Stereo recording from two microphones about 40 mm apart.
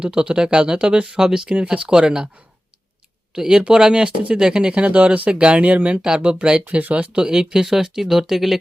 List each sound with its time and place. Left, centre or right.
0.0 s speech: right
3.3 s speech: centre
6.7 s speech: right
7.2 s speech: centre